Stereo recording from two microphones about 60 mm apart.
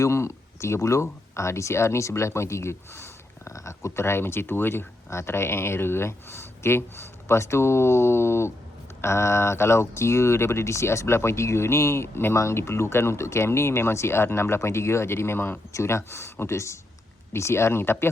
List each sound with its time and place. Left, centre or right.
0.0 s speech: left